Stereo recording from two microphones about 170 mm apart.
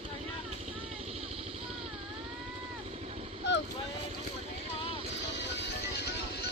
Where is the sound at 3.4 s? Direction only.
90° left.